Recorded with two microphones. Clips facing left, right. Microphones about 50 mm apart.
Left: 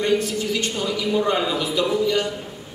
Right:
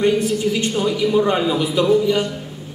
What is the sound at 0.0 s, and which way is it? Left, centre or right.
A man's voice, centre.